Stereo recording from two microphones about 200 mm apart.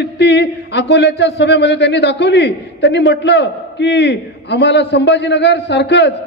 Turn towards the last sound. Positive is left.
turn(degrees=60)  # may be behind; listen again after turning